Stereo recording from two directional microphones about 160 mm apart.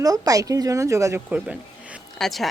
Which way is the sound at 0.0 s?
20° right (ahead or behind).